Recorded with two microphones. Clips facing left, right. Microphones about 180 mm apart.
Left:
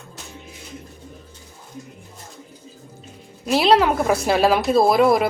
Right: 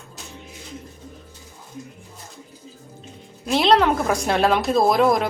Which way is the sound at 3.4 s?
5° left (ahead or behind).